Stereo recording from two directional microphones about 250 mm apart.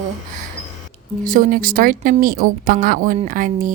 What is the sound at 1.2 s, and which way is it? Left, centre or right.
A woman's voice, right.